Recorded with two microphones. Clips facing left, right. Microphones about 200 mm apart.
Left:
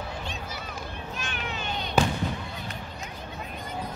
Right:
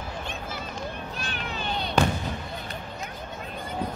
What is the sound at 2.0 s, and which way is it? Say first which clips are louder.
Fireworks: right 1 dB; 5° left (ahead or behind).